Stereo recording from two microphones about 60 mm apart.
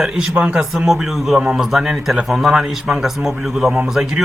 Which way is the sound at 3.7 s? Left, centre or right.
Centre.